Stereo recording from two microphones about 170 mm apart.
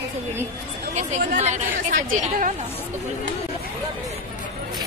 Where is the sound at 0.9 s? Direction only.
45° right (ahead or behind).